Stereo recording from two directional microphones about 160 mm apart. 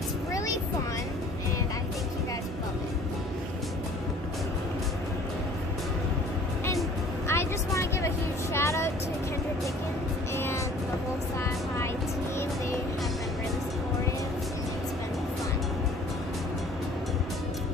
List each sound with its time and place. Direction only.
7.2 s vehicle: 15° left (ahead or behind)
10.3 s music: 15° left (ahead or behind)